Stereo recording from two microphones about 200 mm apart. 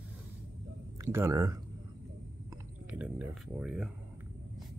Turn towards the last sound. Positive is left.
turn(degrees=-5)  # may be behind; listen again after turning